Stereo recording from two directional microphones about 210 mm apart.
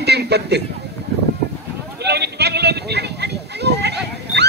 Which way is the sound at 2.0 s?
50° right (ahead or behind).